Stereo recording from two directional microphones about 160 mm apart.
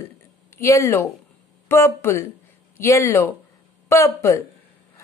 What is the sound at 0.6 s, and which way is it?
A woman's voice, 20° left (ahead or behind).